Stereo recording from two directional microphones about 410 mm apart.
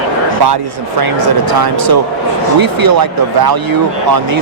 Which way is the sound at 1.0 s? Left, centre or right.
Right.